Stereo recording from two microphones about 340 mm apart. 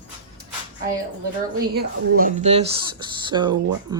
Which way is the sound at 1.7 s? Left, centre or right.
Right.